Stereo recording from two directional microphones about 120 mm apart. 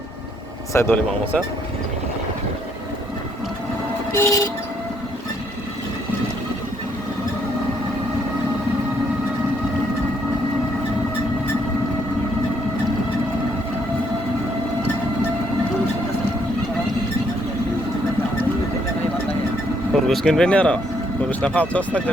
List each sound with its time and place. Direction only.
0.7 s speech: 25° left (ahead or behind)
4.1 s speech: 25° left (ahead or behind)
19.9 s a sound: centre (ahead or behind)
21.2 s speech: 10° left (ahead or behind)